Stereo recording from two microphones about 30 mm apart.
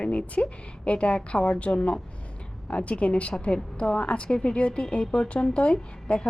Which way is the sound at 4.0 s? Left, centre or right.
Left.